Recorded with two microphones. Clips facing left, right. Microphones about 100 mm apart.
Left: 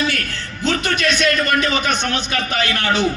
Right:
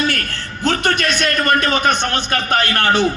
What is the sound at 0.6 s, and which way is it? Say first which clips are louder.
A man's voice: right 2 dB; 45° right (ahead or behind).